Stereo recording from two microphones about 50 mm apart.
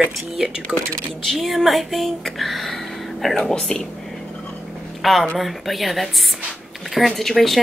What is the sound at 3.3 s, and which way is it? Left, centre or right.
Speech, centre.